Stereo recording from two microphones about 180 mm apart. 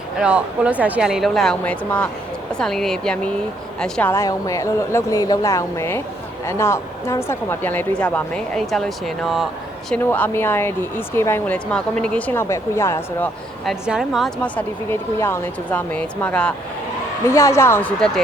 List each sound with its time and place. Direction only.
0.2 s speech: 5° right (ahead or behind); by 13.3 s 15° left (ahead or behind)
13.7 s speech: 5° right (ahead or behind)